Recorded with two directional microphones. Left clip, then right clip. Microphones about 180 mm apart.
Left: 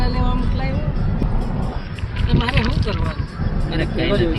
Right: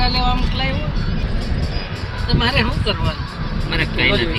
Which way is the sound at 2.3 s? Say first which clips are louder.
Right 3 dB; 10° left (ahead or behind).